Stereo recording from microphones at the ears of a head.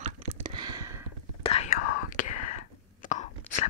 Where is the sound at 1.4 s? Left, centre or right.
Left.